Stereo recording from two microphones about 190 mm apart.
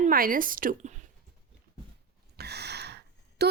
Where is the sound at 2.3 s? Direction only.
60° right (ahead or behind).